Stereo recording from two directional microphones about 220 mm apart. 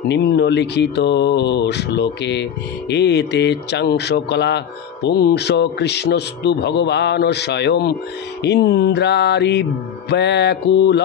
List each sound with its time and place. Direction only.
0.1 s speech: 50° left (ahead or behind)